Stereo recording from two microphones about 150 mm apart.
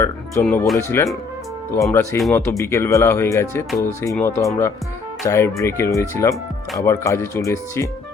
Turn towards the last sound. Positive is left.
turn(degrees=20)  # may be behind; listen again after turning